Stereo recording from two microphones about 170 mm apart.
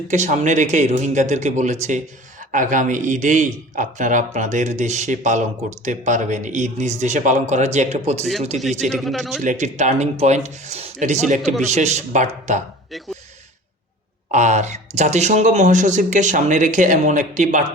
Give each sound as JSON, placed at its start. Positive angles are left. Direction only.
{"t": 0.1, "sound": "a man's voice", "side_deg": -45}
{"t": 8.9, "sound": "a man's voice", "side_deg": 0}
{"t": 9.4, "sound": "a man's voice", "side_deg": -45}
{"t": 14.3, "sound": "a man's voice", "side_deg": -45}